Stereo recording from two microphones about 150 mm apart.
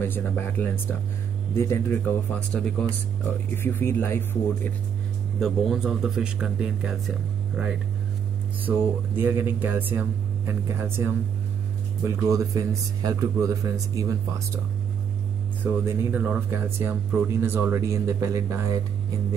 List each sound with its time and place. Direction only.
0.0 s speech: 15° left (ahead or behind)
5.4 s speech: 5° right (ahead or behind)
8.6 s speech: 10° right (ahead or behind)
15.6 s speech: 15° right (ahead or behind)